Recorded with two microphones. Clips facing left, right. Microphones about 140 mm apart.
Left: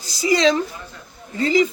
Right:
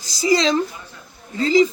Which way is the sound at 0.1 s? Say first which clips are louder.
Even; 35° right (ahead or behind).